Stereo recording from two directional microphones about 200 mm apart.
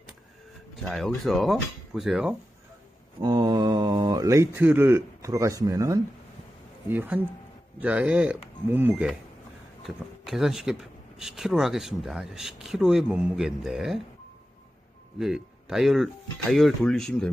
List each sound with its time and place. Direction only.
0.8 s speech: centre (ahead or behind)
3.2 s speech: 20° right (ahead or behind); by 14.0 s centre (ahead or behind)
15.1 s speech: centre (ahead or behind)